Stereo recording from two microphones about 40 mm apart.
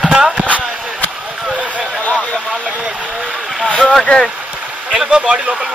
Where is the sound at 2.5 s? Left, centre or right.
Centre.